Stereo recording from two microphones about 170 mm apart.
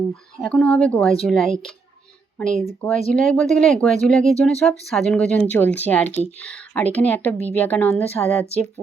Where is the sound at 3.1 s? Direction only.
5° left (ahead or behind).